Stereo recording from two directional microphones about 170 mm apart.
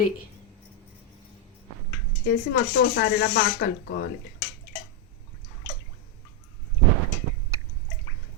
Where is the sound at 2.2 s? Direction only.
75° left (ahead or behind).